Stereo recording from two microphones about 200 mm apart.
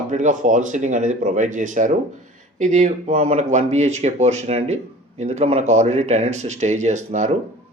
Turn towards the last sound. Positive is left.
turn(degrees=-35)  # may be behind; listen again after turning